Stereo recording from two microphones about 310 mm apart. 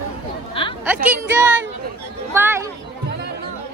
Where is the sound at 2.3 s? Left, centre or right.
Centre.